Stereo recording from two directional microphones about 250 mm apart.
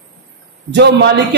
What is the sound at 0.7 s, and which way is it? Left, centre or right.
Speech, right.